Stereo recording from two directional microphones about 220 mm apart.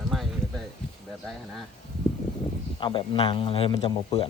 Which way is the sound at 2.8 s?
20° left (ahead or behind).